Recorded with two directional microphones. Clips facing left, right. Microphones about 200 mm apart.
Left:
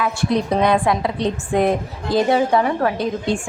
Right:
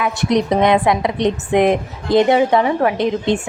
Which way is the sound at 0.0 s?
20° right (ahead or behind).